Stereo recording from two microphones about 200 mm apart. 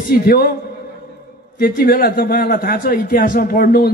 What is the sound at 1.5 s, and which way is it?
A man's voice, 45° left (ahead or behind).